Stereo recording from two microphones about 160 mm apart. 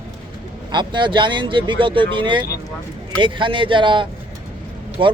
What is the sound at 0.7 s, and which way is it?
Speech, 30° right (ahead or behind).